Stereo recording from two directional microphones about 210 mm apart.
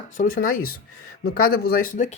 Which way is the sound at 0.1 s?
40° left (ahead or behind).